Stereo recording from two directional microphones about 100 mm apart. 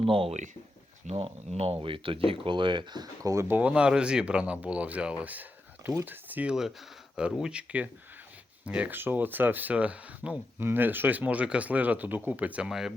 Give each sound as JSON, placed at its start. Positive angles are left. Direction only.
{"t": 0.0, "sound": "speech", "side_deg": -65}
{"t": 1.0, "sound": "speech", "side_deg": -90}
{"t": 3.6, "sound": "speech", "side_deg": -10}